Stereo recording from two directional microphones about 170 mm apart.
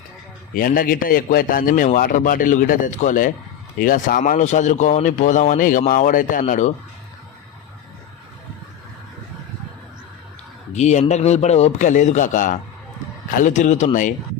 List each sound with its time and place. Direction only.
0.5 s a man's voice: 55° left (ahead or behind)
10.7 s speech: 45° left (ahead or behind)